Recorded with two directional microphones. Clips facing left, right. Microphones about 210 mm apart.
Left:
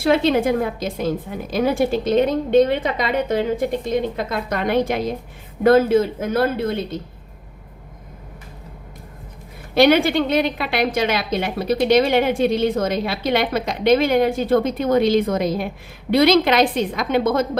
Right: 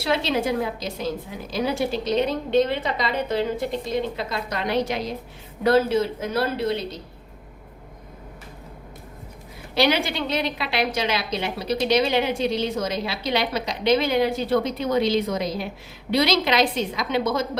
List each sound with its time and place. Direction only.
0.0 s a woman's voice: 50° left (ahead or behind)
9.7 s a woman's voice: 55° left (ahead or behind)